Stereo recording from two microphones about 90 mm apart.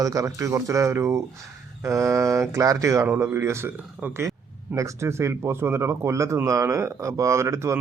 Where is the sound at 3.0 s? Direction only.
25° right (ahead or behind).